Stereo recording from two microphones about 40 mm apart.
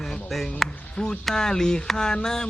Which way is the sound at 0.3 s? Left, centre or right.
Centre.